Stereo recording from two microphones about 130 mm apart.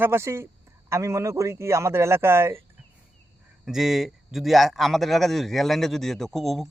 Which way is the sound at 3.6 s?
Centre (ahead or behind).